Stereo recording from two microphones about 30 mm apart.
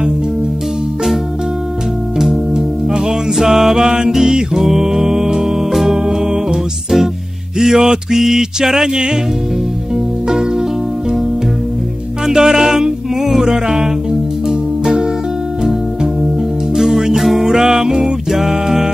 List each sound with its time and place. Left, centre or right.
2.1 s music: centre
3.7 s music: right
7.5 s a sound: centre
8.8 s music: right
12.3 s music: centre
16.7 s music: centre
17.6 s music: centre